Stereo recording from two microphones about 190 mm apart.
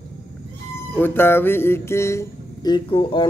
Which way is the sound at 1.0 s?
10° left (ahead or behind).